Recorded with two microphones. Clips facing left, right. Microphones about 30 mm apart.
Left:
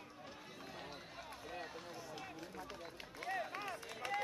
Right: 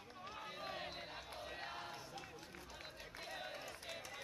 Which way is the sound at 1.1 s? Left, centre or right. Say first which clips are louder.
Left 1 dB; right.